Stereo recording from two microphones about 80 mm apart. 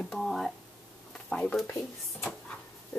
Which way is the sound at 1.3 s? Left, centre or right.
Centre.